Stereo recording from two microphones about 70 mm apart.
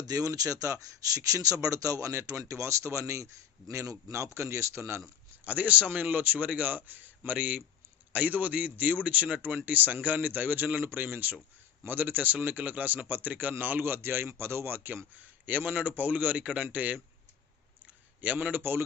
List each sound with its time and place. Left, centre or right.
0.1 s speech: right
5.5 s a man's voice: right
18.2 s a man's voice: centre